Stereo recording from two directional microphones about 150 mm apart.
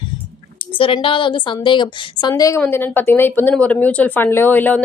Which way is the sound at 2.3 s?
20° left (ahead or behind).